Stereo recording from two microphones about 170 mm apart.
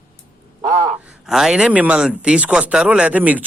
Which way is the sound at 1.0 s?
5° right (ahead or behind).